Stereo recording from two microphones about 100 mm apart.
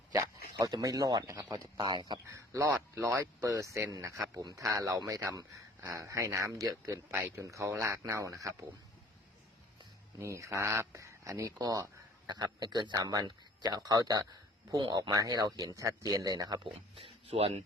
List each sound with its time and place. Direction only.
0.6 s speech: 40° right (ahead or behind)
2.2 s speech: 30° right (ahead or behind)
10.2 s speech: 30° right (ahead or behind); by 15.1 s 50° right (ahead or behind)
15.1 s speech: 35° right (ahead or behind)
16.6 s speech: 65° right (ahead or behind); by 17.6 s 85° right